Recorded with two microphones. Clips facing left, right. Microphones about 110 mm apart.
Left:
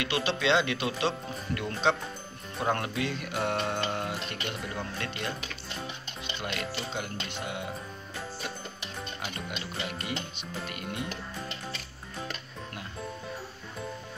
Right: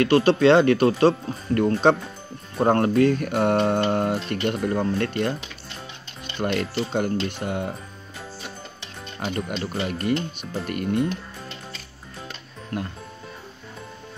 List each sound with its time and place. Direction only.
0.0 s speech: 45° right (ahead or behind)
6.3 s speech: 45° right (ahead or behind)
9.2 s speech: 45° right (ahead or behind)